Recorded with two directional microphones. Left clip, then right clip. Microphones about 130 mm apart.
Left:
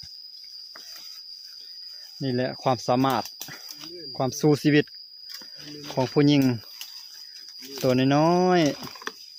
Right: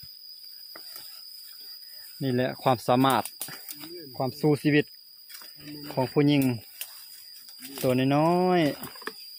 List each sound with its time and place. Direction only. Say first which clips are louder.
2.2 s speech: even; 15° left (ahead or behind)
4.2 s speech: left 3 dB; 50° left (ahead or behind)
7.8 s speech: left 3 dB; 40° left (ahead or behind)